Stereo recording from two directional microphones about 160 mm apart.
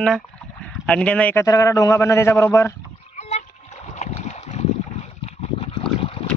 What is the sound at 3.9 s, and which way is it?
Boat, 45° left (ahead or behind).